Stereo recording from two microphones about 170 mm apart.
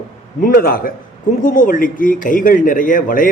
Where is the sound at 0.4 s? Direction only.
60° left (ahead or behind).